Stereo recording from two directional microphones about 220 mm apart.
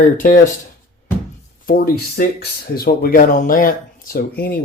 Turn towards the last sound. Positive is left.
turn(degrees=45)  # may be behind; listen again after turning